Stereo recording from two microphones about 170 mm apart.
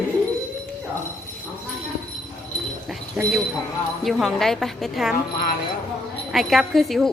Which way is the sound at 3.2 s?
10° right (ahead or behind).